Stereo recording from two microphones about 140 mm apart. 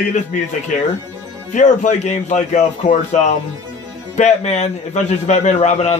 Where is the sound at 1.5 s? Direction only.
60° left (ahead or behind).